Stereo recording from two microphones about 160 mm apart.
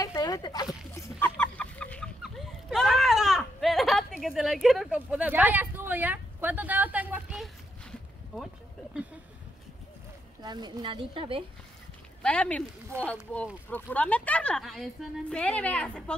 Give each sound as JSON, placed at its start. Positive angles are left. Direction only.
{"t": 0.0, "sound": "a sound", "side_deg": 20}
{"t": 0.9, "sound": "chicken", "side_deg": 15}
{"t": 10.4, "sound": "speech", "side_deg": -25}
{"t": 12.2, "sound": "a woman's voice", "side_deg": 5}